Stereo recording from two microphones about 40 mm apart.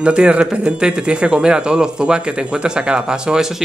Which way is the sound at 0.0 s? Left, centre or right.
Right.